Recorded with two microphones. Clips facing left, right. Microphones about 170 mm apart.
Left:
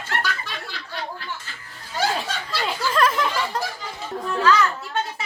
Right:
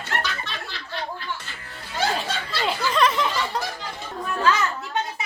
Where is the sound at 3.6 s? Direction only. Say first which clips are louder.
Left 1 dB; centre (ahead or behind).